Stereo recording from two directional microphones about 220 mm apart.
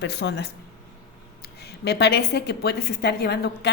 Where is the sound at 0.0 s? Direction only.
50° left (ahead or behind).